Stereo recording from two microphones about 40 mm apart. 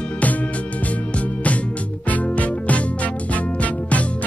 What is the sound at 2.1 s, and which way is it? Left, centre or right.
Music, left.